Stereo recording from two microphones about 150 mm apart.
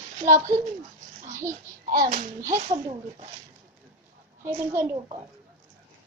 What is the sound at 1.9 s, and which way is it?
Speech, 65° right (ahead or behind).